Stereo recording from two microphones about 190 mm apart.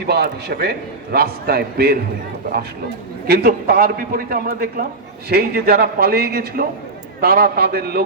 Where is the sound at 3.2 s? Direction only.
55° right (ahead or behind).